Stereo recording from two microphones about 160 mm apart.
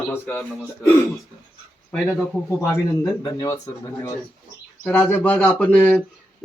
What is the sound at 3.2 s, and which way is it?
A man's voice, 20° left (ahead or behind).